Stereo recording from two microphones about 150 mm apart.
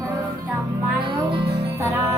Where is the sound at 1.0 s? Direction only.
35° right (ahead or behind).